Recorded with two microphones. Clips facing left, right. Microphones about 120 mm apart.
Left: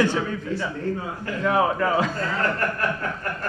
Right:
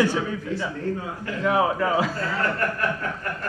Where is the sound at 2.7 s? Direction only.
35° left (ahead or behind).